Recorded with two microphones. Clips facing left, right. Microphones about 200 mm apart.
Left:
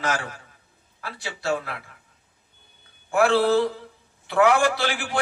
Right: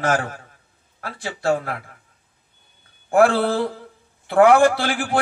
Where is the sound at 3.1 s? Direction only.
50° right (ahead or behind).